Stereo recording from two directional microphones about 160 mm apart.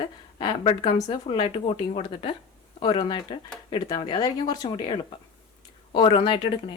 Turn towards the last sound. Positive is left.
turn(degrees=30)  # may be behind; listen again after turning